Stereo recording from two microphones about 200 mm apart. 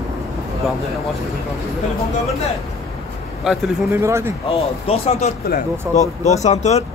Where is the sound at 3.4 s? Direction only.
Centre (ahead or behind).